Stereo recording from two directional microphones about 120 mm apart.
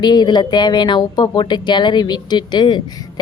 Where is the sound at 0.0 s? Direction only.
35° left (ahead or behind).